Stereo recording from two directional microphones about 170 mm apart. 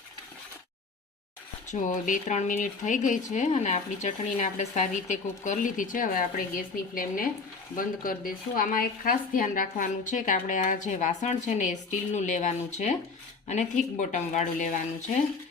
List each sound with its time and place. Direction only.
1.7 s speech: 50° left (ahead or behind)